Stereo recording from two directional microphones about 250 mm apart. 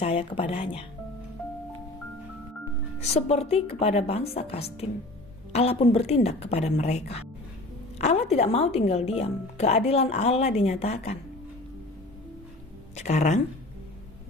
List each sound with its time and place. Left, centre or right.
0.0 s speech: left
3.0 s speech: left
13.0 s speech: left